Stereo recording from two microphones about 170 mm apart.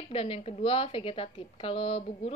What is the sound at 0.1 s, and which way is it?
A woman's voice, 35° left (ahead or behind).